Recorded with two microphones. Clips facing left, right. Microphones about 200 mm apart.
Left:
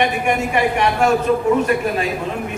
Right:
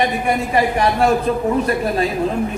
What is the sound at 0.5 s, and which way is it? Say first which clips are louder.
Speech: right 1 dB; 35° right (ahead or behind).